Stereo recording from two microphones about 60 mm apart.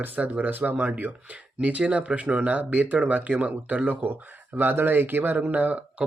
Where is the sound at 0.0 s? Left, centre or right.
Right.